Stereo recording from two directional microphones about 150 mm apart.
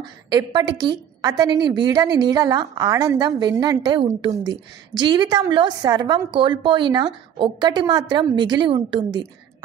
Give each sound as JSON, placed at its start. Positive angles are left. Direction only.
{"t": 0.0, "sound": "a woman's voice", "side_deg": -25}